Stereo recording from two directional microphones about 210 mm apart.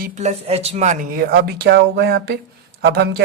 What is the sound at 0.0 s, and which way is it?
Speech, 35° right (ahead or behind).